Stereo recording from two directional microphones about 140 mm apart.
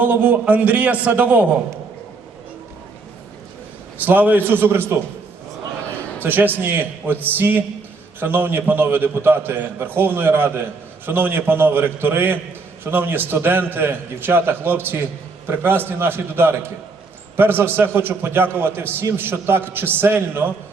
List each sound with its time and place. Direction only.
0.0 s a man's voice: 10° right (ahead or behind)
4.0 s a man's voice: 10° right (ahead or behind)
6.1 s a man's voice: 15° right (ahead or behind)